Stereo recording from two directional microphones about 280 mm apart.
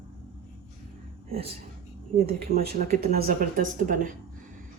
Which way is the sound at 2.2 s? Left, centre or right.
Right.